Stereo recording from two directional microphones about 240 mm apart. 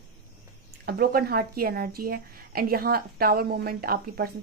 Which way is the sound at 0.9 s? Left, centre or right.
Right.